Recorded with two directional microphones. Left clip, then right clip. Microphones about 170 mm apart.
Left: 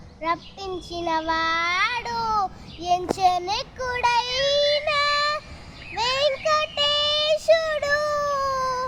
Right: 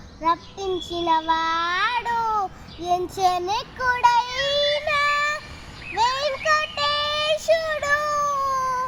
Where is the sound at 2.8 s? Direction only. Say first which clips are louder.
Left 1 dB; 25° left (ahead or behind).